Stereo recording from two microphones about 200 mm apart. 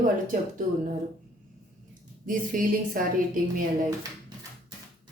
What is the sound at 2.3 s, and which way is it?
Speech, 45° right (ahead or behind).